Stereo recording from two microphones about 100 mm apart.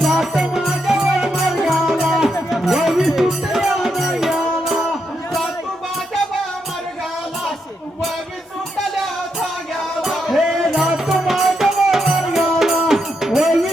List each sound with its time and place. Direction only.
0.0 s music: centre (ahead or behind)
10.0 s music: centre (ahead or behind)